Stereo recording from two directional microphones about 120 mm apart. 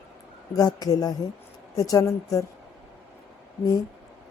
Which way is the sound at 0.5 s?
30° left (ahead or behind).